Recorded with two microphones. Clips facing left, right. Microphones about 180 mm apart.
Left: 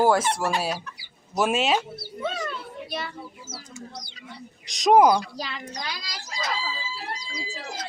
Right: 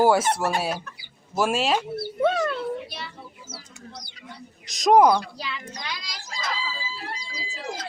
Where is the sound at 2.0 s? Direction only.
55° right (ahead or behind).